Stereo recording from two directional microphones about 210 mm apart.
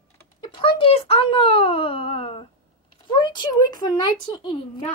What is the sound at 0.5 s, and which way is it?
A child's voice, 25° left (ahead or behind).